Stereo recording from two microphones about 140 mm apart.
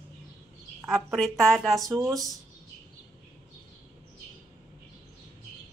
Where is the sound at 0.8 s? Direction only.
Centre (ahead or behind).